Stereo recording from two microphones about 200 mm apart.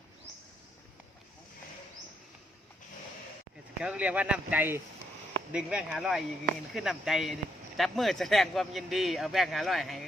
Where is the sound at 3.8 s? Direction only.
5° right (ahead or behind).